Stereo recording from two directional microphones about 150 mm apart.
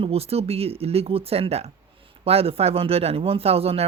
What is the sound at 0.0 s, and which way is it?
Speech, 40° right (ahead or behind).